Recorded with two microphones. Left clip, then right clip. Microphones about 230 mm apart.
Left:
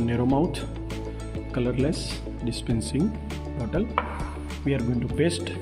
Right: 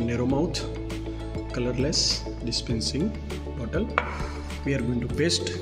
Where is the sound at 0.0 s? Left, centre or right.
Left.